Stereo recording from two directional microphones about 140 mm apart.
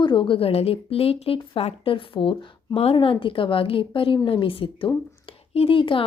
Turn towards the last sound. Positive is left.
turn(degrees=40)  # may be behind; listen again after turning